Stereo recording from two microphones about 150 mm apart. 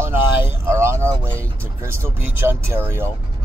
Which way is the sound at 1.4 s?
15° right (ahead or behind).